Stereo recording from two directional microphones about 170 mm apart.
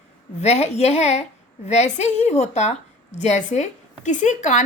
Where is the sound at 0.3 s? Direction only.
40° left (ahead or behind).